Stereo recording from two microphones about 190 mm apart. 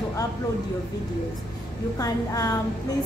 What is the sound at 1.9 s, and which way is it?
Speech, 20° left (ahead or behind).